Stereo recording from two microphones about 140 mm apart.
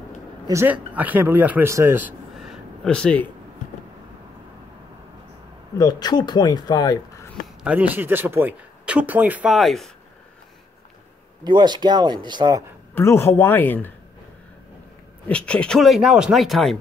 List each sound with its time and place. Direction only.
0.5 s speech: 15° right (ahead or behind)
2.3 s a sound: centre (ahead or behind)
5.8 s speech: 30° left (ahead or behind)
7.6 s speech: 10° right (ahead or behind)
9.5 s speech: centre (ahead or behind)
11.4 s speech: 35° right (ahead or behind)
12.9 s speech: 20° left (ahead or behind)
15.2 s speech: 10° left (ahead or behind)